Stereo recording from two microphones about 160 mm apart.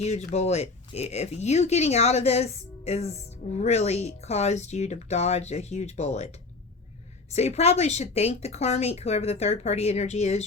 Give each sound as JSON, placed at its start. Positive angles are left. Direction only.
{"t": 0.0, "sound": "speech", "side_deg": 45}
{"t": 7.3, "sound": "speech", "side_deg": 40}